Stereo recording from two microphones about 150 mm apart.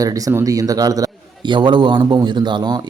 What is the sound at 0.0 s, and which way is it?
A man's voice, 25° right (ahead or behind).